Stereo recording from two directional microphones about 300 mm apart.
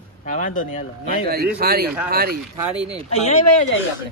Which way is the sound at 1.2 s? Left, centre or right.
Right.